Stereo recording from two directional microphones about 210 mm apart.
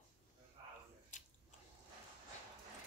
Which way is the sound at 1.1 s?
35° left (ahead or behind).